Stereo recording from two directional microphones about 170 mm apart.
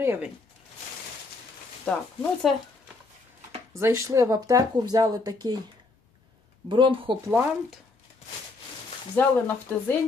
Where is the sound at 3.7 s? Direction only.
15° right (ahead or behind).